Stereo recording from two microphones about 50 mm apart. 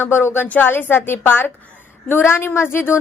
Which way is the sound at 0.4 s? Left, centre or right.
Left.